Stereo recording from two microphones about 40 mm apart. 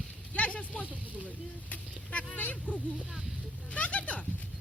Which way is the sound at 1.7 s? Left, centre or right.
Left.